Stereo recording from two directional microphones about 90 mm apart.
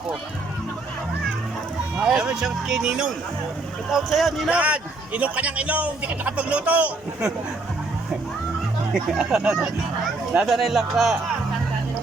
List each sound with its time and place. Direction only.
2.0 s a man's voice: 10° right (ahead or behind)
4.4 s a man's voice: 15° right (ahead or behind)
8.9 s a man's voice: 5° right (ahead or behind)